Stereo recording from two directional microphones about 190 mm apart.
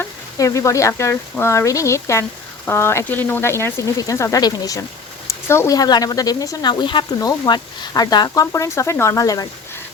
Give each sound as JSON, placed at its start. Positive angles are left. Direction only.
{"t": 0.0, "sound": "speech", "side_deg": 15}